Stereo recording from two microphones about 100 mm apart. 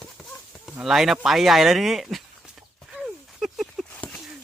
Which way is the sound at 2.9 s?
5° right (ahead or behind).